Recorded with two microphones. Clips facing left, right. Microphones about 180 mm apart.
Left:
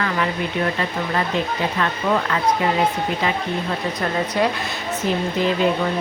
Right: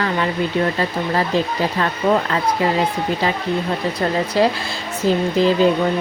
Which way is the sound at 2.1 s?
40° right (ahead or behind).